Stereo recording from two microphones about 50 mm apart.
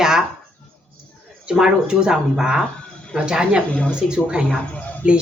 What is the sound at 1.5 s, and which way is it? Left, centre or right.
Speech, centre.